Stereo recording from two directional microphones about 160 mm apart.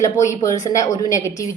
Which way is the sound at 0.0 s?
20° left (ahead or behind).